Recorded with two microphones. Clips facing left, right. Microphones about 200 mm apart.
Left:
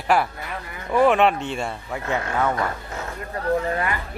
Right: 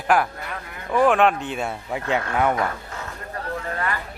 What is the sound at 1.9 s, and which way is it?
Speech, 15° right (ahead or behind).